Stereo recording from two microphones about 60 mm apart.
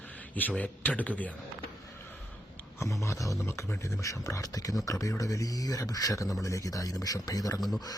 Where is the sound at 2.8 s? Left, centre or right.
Left.